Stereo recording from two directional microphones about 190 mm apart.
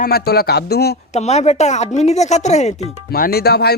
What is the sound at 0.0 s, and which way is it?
Speech, 55° left (ahead or behind).